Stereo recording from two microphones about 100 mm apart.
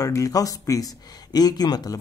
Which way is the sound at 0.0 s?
35° left (ahead or behind).